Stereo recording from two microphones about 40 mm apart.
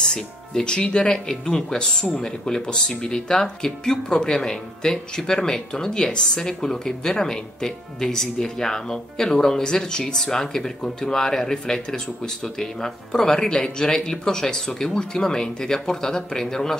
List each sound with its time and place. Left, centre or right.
0.0 s speech: centre